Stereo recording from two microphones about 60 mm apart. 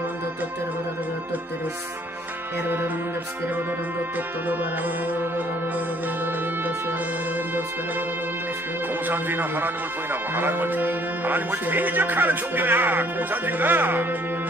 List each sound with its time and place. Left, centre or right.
9.0 s speech: right